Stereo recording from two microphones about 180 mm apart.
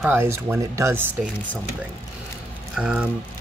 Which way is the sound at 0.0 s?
10° right (ahead or behind).